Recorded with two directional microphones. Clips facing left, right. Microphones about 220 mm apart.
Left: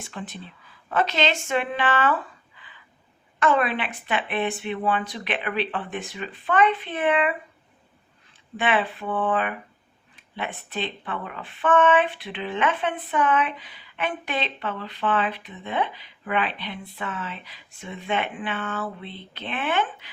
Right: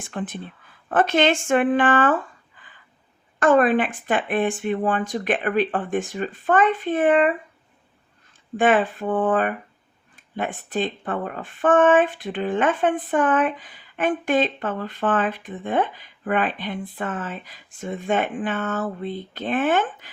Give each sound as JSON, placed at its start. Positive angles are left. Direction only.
{"t": 0.0, "sound": "speech", "side_deg": -55}
{"t": 8.5, "sound": "speech", "side_deg": -45}